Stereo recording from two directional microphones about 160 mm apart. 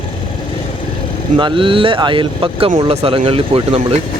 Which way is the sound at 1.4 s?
30° right (ahead or behind).